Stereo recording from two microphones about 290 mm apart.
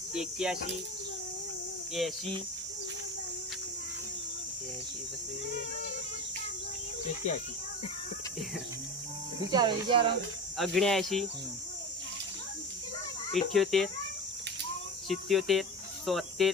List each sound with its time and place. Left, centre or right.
0.1 s speech: centre
1.9 s speech: centre
9.5 s speech: centre
10.6 s speech: centre
13.3 s speech: centre
15.1 s speech: centre